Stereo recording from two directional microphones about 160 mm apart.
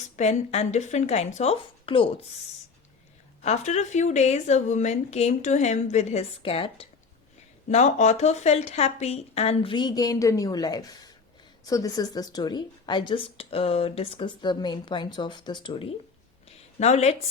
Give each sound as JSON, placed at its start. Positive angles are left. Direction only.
{"t": 0.2, "sound": "a woman's voice", "side_deg": 45}
{"t": 3.4, "sound": "a woman's voice", "side_deg": 45}
{"t": 7.7, "sound": "a woman's voice", "side_deg": 45}
{"t": 16.8, "sound": "a woman's voice", "side_deg": 45}